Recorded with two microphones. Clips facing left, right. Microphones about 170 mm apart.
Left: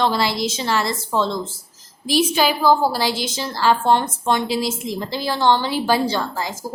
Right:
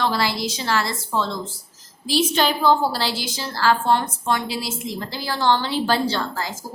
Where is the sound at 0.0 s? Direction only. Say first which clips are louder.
Left 3 dB; 20° left (ahead or behind).